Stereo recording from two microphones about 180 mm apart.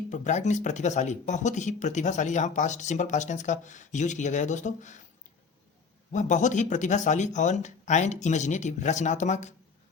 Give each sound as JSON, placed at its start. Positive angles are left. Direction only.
{"t": 0.1, "sound": "speech", "side_deg": 40}
{"t": 6.1, "sound": "speech", "side_deg": 45}